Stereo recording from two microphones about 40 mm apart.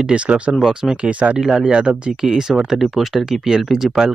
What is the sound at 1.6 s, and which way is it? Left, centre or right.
Speech, right.